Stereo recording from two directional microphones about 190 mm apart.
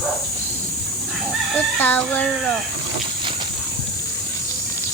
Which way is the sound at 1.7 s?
10° left (ahead or behind).